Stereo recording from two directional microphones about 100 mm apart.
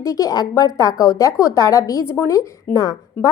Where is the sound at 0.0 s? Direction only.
35° left (ahead or behind).